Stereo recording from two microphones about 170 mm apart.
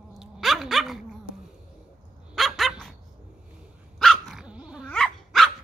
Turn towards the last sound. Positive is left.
turn(degrees=5)  # may be behind; listen again after turning